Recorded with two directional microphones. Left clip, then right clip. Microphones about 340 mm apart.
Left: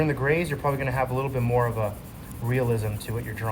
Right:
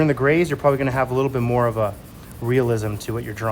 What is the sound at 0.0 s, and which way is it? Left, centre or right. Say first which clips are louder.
Speech: right 6 dB; right.